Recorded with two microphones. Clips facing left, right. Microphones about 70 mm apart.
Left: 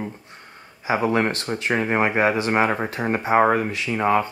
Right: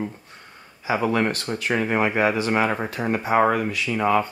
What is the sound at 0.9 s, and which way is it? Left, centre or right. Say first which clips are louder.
Speech: left 1 dB; left.